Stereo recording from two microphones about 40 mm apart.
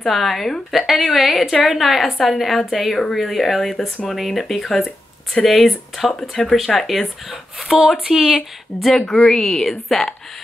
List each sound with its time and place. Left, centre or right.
0.0 s a woman's voice: centre
8.0 s speech: centre
9.1 s a woman's voice: centre